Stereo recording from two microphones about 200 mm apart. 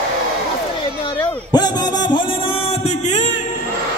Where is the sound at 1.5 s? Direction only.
20° left (ahead or behind).